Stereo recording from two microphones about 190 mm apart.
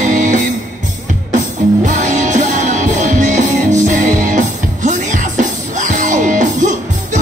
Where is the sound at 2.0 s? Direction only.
40° right (ahead or behind).